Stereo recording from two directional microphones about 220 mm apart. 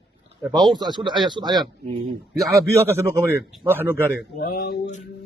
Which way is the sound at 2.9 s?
10° right (ahead or behind).